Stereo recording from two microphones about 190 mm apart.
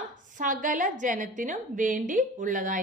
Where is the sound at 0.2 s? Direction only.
45° right (ahead or behind).